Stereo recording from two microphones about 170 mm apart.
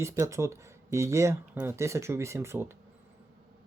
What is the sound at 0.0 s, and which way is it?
Speech, 15° right (ahead or behind).